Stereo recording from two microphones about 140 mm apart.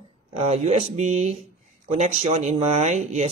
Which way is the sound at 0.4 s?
50° right (ahead or behind).